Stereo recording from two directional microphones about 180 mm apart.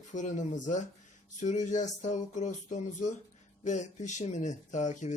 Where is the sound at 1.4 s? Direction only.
40° left (ahead or behind).